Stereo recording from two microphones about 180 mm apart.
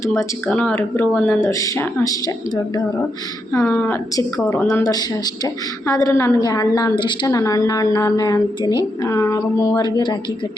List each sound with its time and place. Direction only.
0.0 s speech: 15° left (ahead or behind)
3.5 s a woman's voice: 10° left (ahead or behind)